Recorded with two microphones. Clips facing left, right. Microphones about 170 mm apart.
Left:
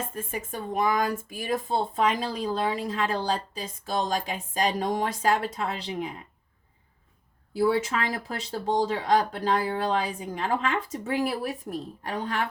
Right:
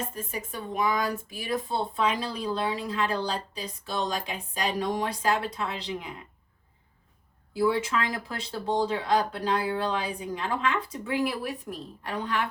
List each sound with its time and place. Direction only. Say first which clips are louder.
0.1 s speech: left 2 dB; 50° left (ahead or behind)
7.6 s speech: left 1 dB; 45° left (ahead or behind)